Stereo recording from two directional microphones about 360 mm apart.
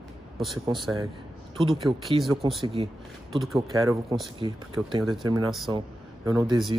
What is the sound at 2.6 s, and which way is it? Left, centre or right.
Speech, centre.